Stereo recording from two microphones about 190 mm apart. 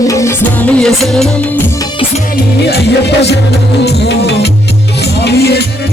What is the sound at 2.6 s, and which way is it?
Music, 60° left (ahead or behind).